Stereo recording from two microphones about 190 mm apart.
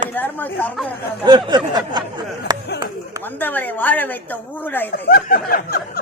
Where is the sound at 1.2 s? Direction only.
25° right (ahead or behind).